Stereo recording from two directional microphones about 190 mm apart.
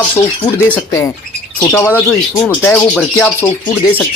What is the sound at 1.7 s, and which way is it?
Speech, 10° left (ahead or behind).